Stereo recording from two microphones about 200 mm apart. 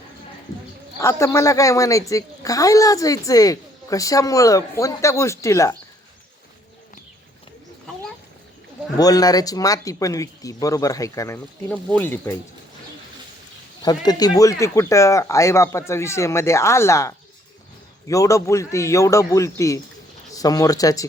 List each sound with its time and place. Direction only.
0.9 s a woman's voice: 15° left (ahead or behind)
9.0 s a woman's voice: 20° left (ahead or behind)
13.8 s a woman's voice: 20° left (ahead or behind)